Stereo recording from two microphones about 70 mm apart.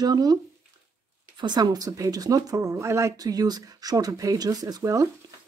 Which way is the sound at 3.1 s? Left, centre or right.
Right.